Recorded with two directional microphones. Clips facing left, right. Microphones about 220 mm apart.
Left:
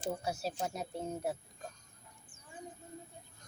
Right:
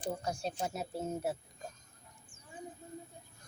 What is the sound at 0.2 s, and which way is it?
A woman's voice, 5° left (ahead or behind).